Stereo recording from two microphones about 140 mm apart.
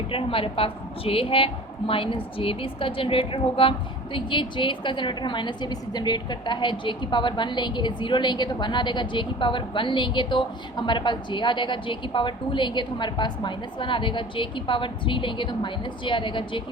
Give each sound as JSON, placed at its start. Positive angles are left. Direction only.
{"t": 0.1, "sound": "a woman's voice", "side_deg": 40}